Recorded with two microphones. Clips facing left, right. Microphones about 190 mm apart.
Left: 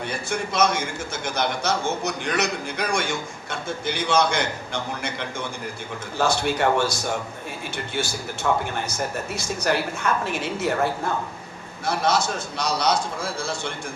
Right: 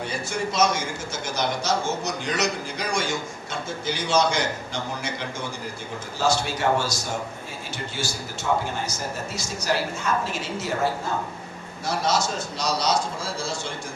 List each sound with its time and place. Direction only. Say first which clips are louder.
0.0 s a man's voice: even; 55° left (ahead or behind)
6.1 s a man's voice: left 2 dB; 55° left (ahead or behind)
11.9 s a man's voice: left 2 dB; 55° left (ahead or behind)